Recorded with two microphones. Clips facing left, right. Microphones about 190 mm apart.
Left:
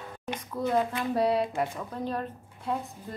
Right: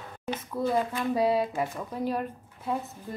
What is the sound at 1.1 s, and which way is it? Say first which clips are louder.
A woman's voice: even; centre (ahead or behind).